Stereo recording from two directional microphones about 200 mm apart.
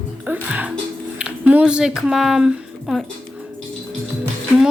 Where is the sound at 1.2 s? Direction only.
5° right (ahead or behind).